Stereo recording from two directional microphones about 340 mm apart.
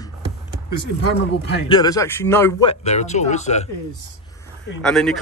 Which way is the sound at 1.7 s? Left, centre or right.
Centre.